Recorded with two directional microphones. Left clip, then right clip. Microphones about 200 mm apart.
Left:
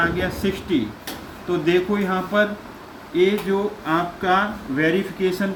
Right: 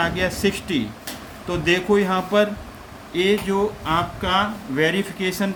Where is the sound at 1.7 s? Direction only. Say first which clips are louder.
Right 3 dB; 55° right (ahead or behind).